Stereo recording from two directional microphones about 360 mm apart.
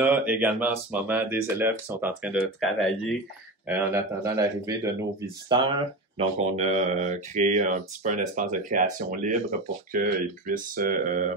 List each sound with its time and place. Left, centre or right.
0.0 s speech: centre
6.1 s speech: centre